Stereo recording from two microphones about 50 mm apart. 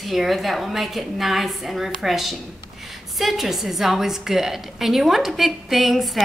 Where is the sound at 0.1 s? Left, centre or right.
Centre.